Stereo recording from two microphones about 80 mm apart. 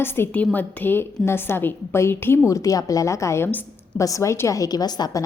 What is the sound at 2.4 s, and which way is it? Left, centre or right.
A woman's voice, left.